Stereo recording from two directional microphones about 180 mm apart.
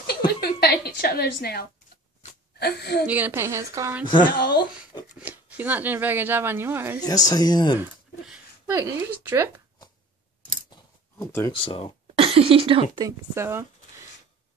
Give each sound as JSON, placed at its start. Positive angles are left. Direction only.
{"t": 0.0, "sound": "a sound", "side_deg": 60}
{"t": 2.6, "sound": "a woman's voice", "side_deg": 65}
{"t": 3.1, "sound": "speech", "side_deg": -10}
{"t": 4.0, "sound": "speech", "side_deg": 25}
{"t": 4.3, "sound": "a woman's voice", "side_deg": 55}
{"t": 5.2, "sound": "speech", "side_deg": -10}
{"t": 7.0, "sound": "speech", "side_deg": 20}
{"t": 7.8, "sound": "speech", "side_deg": -15}
{"t": 11.1, "sound": "speech", "side_deg": 15}
{"t": 11.5, "sound": "speech", "side_deg": 30}
{"t": 12.2, "sound": "speech", "side_deg": -30}
{"t": 12.9, "sound": "speech", "side_deg": -20}